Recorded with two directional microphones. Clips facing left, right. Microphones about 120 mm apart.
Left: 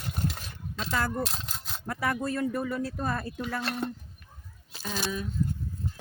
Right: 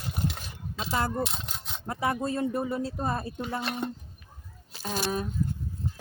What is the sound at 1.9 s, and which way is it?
Speech, 25° right (ahead or behind).